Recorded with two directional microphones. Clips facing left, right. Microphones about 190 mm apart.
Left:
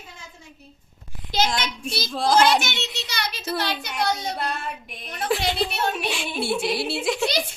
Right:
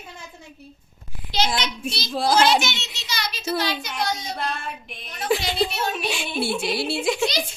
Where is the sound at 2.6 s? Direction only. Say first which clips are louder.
Even; 55° left (ahead or behind).